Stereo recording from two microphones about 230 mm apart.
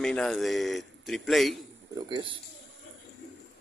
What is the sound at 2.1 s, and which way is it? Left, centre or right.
Speech, right.